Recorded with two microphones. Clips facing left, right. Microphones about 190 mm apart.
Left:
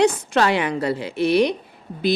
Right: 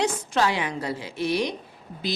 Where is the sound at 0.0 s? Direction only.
65° left (ahead or behind).